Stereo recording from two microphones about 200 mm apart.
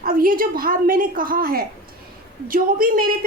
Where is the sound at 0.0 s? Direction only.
45° right (ahead or behind).